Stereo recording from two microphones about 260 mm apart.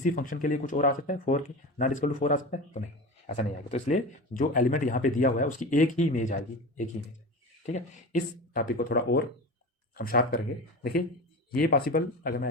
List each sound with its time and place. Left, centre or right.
0.0 s speech: left
11.5 s speech: left